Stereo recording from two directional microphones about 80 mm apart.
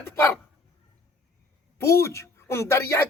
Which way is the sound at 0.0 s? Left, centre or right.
Left.